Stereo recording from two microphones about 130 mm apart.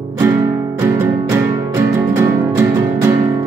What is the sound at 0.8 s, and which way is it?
Music, 25° right (ahead or behind).